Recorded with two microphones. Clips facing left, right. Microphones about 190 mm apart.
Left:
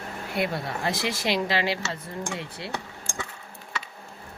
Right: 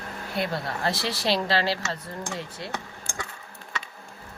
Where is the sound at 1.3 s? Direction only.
15° left (ahead or behind).